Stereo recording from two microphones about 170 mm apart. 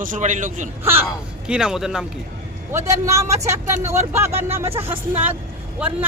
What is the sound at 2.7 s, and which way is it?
Speech, 15° right (ahead or behind).